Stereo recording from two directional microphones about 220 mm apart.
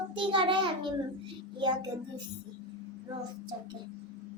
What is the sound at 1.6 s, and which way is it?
Speech, 20° right (ahead or behind).